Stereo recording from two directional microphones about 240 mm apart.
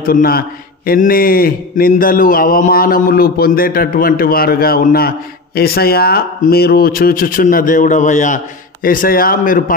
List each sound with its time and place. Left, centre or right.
0.0 s a man's voice: left